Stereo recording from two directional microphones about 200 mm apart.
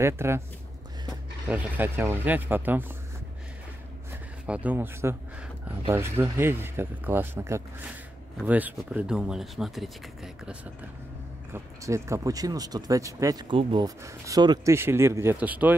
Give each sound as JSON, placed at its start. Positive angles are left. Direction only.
{"t": 0.0, "sound": "speech", "side_deg": -15}
{"t": 1.5, "sound": "speech", "side_deg": -10}
{"t": 4.5, "sound": "speech", "side_deg": -5}
{"t": 11.5, "sound": "speech", "side_deg": -15}